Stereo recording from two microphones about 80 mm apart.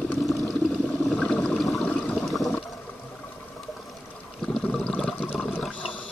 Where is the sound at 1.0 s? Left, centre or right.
Centre.